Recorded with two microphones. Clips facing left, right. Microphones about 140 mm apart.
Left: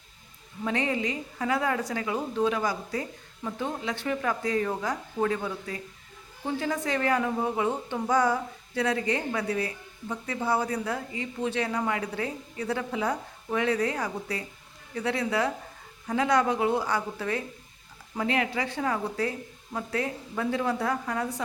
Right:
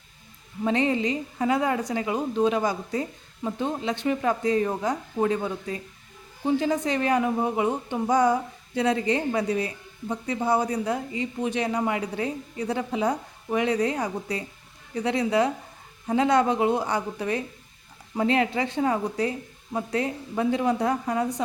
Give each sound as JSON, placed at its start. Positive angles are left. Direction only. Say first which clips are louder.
{"t": 0.6, "sound": "a woman's voice", "louder": "right 5 dB", "side_deg": -25}